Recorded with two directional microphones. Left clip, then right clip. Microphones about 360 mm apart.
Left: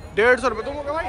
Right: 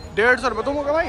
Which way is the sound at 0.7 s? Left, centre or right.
Centre.